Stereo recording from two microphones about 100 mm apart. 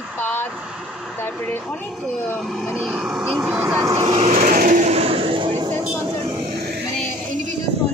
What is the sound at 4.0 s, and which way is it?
Speech, 85° right.